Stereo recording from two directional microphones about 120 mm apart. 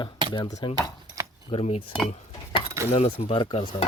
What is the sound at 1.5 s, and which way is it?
Cutlery, 55° left (ahead or behind).